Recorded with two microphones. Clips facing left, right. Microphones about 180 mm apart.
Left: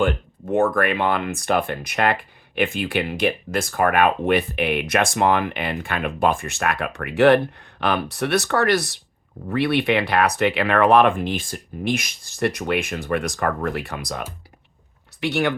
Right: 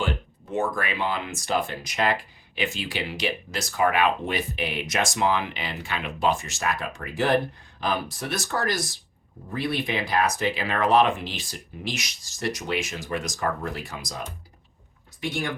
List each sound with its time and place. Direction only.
0.0 s speech: 55° left (ahead or behind); by 15.5 s 70° left (ahead or behind)